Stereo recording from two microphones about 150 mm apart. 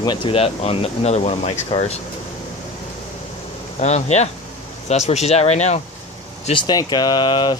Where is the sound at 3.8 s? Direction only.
50° left (ahead or behind).